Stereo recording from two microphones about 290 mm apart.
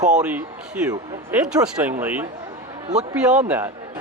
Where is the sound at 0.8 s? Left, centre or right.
Centre.